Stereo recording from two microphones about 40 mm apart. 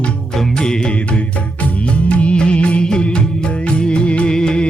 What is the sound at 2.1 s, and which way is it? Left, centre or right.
Music, left.